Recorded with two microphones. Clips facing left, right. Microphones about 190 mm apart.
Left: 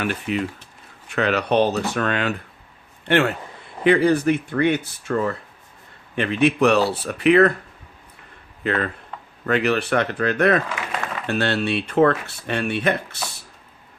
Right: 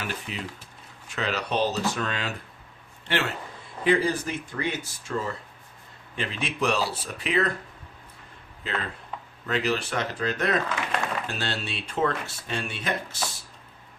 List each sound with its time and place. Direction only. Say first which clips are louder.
0.0 s speech: left 10 dB; 60° left (ahead or behind)
8.6 s speech: left 9 dB; 60° left (ahead or behind)